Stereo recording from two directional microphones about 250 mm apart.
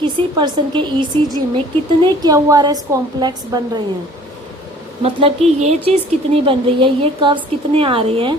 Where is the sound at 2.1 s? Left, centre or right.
Centre.